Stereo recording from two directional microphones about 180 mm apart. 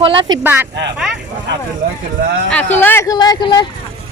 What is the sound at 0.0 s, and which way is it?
Speech, 30° right (ahead or behind).